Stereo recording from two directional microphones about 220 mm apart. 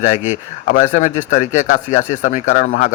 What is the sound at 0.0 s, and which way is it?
Speech, 35° left (ahead or behind).